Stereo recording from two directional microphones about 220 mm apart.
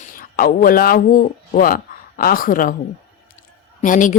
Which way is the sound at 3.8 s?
35° left (ahead or behind).